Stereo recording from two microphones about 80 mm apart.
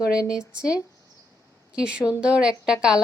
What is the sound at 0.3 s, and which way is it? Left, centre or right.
Speech, centre.